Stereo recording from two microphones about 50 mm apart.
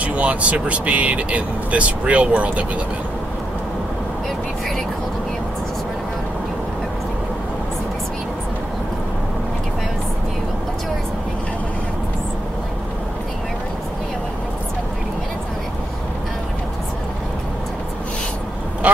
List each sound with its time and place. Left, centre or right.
0.0 s speech: right